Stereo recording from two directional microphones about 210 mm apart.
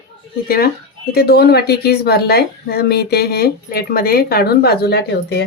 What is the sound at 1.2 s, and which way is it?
A woman's voice, 50° left (ahead or behind).